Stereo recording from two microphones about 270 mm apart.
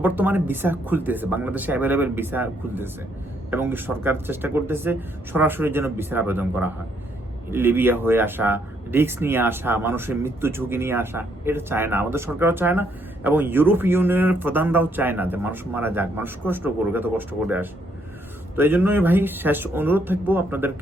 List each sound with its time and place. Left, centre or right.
0.0 s speech: centre